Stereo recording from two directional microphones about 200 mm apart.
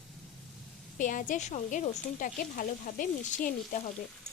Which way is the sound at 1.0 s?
40° left (ahead or behind).